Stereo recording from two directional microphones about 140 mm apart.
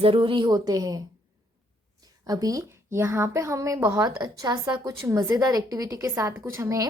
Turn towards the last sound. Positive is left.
turn(degrees=-20)  # may be behind; listen again after turning